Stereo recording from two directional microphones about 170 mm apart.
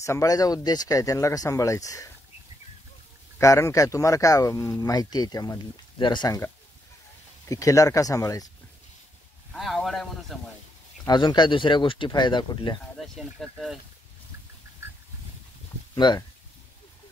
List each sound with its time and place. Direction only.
0.0 s speech: 20° left (ahead or behind)
3.3 s speech: 15° left (ahead or behind)
9.5 s speech: centre (ahead or behind)
11.1 s speech: 25° left (ahead or behind)
12.9 s speech: centre (ahead or behind)
15.9 s speech: 25° left (ahead or behind)